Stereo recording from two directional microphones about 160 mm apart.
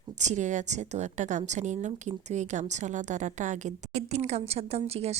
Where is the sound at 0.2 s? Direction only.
50° right (ahead or behind).